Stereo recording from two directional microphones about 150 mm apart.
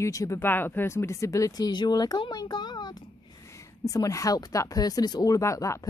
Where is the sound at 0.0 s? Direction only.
20° left (ahead or behind).